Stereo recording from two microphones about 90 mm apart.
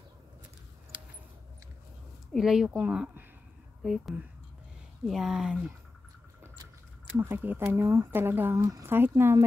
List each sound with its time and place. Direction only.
2.3 s speech: 5° right (ahead or behind)
2.7 s speech: 15° right (ahead or behind)
3.8 s speech: centre (ahead or behind)
7.2 s speech: 25° right (ahead or behind)